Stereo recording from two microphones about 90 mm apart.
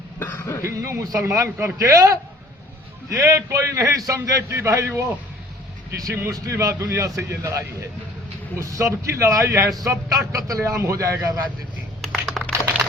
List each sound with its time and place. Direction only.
0.2 s cough: 25° left (ahead or behind)
0.6 s a man's voice: 35° right (ahead or behind)
6.3 s a man's voice: 40° right (ahead or behind)
12.2 s computer keyboard: 5° left (ahead or behind)